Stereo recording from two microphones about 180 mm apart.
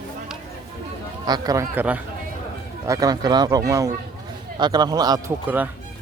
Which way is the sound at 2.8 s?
20° right (ahead or behind).